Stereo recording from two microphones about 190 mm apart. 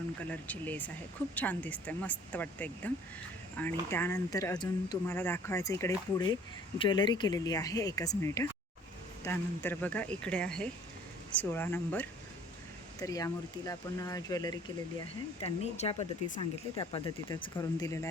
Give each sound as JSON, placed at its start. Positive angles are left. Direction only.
{"t": 0.3, "sound": "speech", "side_deg": 10}
{"t": 15.6, "sound": "speech", "side_deg": 35}
{"t": 17.4, "sound": "speech", "side_deg": 20}